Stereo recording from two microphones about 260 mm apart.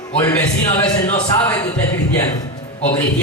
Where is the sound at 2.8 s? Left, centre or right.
Centre.